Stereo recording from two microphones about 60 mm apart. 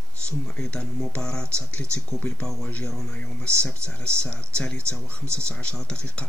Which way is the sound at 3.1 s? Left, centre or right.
Left.